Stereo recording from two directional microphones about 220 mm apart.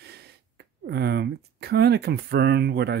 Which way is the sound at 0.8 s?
50° right (ahead or behind).